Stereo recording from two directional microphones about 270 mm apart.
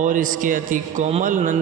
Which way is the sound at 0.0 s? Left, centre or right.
Right.